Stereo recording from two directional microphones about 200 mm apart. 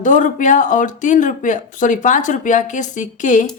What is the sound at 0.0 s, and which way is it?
A woman's voice, 40° left (ahead or behind).